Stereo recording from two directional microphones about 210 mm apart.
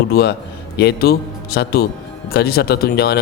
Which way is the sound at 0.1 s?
50° left (ahead or behind).